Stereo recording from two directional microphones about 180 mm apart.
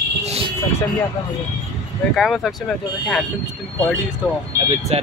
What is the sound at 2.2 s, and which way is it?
Speech, centre (ahead or behind).